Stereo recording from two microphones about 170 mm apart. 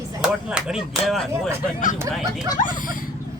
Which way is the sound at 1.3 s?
15° right (ahead or behind).